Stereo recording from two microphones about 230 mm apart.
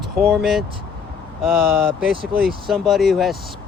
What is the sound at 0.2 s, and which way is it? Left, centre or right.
Speech, centre.